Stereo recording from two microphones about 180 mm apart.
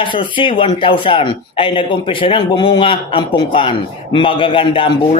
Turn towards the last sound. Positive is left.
turn(degrees=30)  # may be behind; listen again after turning